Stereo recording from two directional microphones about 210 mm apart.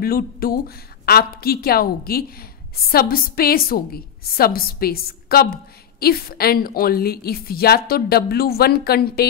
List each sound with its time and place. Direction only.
0.0 s a woman's voice: 45° left (ahead or behind)